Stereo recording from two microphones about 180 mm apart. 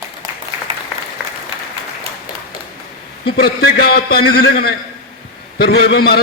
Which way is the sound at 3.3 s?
60° left (ahead or behind).